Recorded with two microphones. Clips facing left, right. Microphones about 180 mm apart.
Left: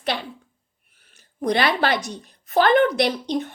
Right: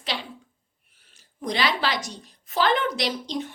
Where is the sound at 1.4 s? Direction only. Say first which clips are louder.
Left 5 dB; 55° left (ahead or behind).